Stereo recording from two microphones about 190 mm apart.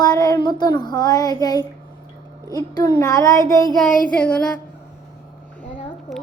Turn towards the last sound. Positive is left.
turn(degrees=0)  # may be behind; listen again after turning